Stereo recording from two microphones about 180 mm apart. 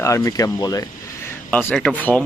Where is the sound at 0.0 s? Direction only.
15° left (ahead or behind).